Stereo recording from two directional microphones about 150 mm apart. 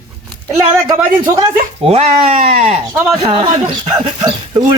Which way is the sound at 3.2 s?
35° right (ahead or behind).